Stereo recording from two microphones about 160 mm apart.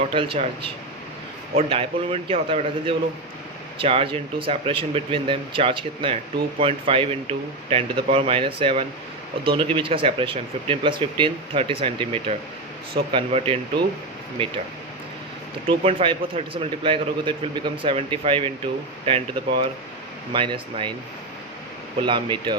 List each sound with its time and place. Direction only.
0.1 s speech: 35° right (ahead or behind)
15.6 s speech: 35° right (ahead or behind)
22.0 s speech: 30° right (ahead or behind)